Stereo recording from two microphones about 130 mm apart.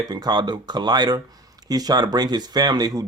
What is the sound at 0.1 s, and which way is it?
Speech, 30° right (ahead or behind).